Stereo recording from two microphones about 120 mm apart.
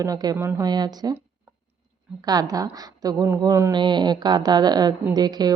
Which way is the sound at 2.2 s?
30° right (ahead or behind).